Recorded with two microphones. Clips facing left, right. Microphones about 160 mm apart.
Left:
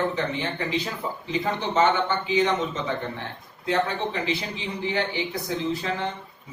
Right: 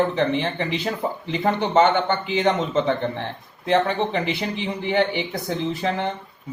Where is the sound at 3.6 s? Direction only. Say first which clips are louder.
Right 5 dB; 60° right (ahead or behind).